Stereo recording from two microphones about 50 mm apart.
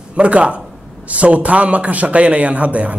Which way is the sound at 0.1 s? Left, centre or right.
Right.